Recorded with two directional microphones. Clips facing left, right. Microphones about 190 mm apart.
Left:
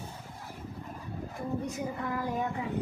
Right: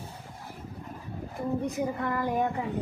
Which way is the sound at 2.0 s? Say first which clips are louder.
Right 4 dB; 65° right (ahead or behind).